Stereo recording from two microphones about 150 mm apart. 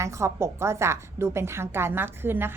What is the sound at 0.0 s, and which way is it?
A woman's voice, 20° right (ahead or behind).